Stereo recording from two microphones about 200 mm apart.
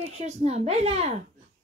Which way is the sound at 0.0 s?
35° right (ahead or behind).